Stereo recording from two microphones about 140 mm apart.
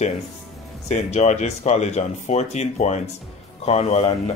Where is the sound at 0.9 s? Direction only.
60° left (ahead or behind).